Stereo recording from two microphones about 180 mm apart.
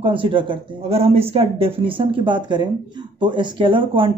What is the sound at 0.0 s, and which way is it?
Speech, 30° right (ahead or behind).